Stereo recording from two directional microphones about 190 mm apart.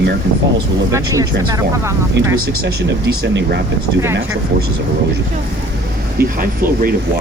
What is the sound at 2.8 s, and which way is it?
Speech, 70° right (ahead or behind).